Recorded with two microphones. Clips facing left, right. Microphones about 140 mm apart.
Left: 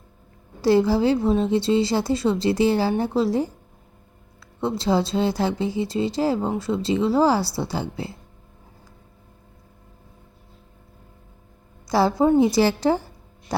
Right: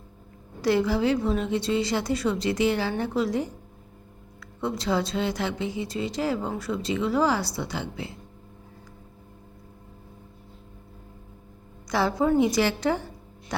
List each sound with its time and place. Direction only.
0.6 s a woman's voice: 30° left (ahead or behind)
11.9 s speech: 30° left (ahead or behind)